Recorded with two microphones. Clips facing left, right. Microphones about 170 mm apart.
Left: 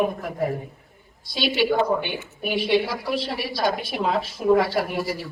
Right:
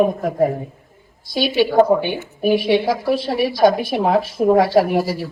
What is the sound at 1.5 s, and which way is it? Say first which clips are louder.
A woman's voice: right 7 dB; 55° right (ahead or behind).